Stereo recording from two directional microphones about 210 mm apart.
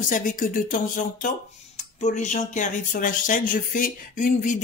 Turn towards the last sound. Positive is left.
turn(degrees=40)  # may be behind; listen again after turning